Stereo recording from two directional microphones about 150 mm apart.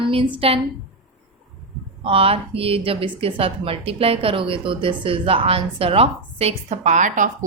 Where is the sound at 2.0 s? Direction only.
40° right (ahead or behind).